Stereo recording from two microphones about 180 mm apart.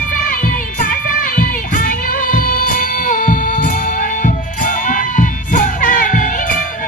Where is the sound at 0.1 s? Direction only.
50° left (ahead or behind).